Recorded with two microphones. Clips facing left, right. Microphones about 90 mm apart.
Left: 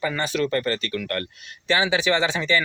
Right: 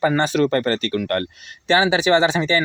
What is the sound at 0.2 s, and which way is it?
Speech, 30° right (ahead or behind).